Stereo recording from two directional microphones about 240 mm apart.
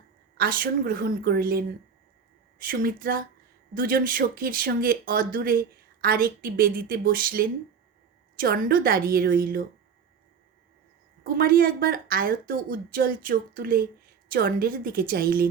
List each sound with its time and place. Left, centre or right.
0.3 s speech: right
11.2 s speech: right